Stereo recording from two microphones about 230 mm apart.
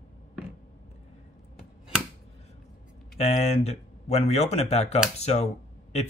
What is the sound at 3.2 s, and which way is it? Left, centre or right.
Speech, left.